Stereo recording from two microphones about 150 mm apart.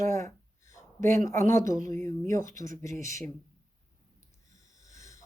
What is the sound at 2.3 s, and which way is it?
Speech, 65° right (ahead or behind).